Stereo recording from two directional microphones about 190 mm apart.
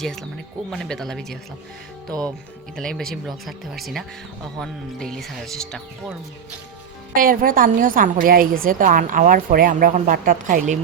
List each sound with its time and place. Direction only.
0.0 s speech: centre (ahead or behind)
2.7 s speech: 5° left (ahead or behind)
7.2 s a woman's voice: 45° right (ahead or behind)